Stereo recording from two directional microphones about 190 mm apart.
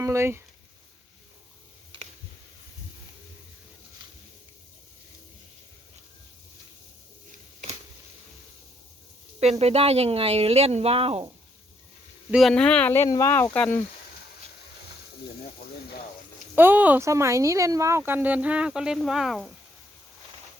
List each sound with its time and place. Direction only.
0.0 s speech: 15° right (ahead or behind)
9.4 s speech: 35° right (ahead or behind)
12.3 s speech: centre (ahead or behind)
16.6 s speech: 10° right (ahead or behind)